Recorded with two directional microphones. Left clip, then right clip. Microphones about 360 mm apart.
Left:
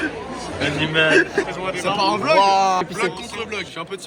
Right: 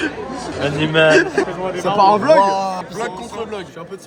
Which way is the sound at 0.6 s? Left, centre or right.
Right.